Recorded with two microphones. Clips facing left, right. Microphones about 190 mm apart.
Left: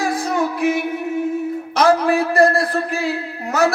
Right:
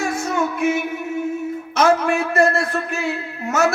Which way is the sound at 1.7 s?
35° left (ahead or behind).